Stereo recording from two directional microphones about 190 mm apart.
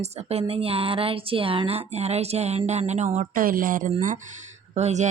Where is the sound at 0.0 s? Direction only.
35° right (ahead or behind).